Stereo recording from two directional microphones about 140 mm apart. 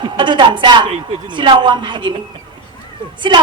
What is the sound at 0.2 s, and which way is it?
A woman's voice, 35° right (ahead or behind).